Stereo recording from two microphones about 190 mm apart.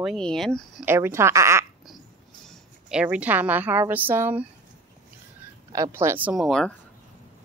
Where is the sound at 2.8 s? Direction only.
5° right (ahead or behind).